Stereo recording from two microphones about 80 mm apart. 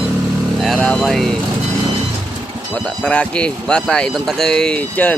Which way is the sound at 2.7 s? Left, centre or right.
Centre.